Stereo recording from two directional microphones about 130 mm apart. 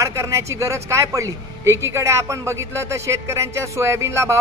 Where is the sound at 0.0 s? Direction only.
20° right (ahead or behind).